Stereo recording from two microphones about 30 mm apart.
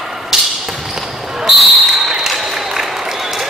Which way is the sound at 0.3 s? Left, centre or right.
Centre.